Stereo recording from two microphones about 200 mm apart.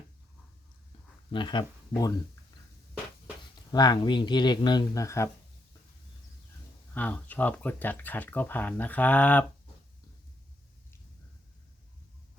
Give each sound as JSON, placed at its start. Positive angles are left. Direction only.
{"t": 1.3, "sound": "speech", "side_deg": 25}
{"t": 3.7, "sound": "speech", "side_deg": 20}
{"t": 6.9, "sound": "speech", "side_deg": 10}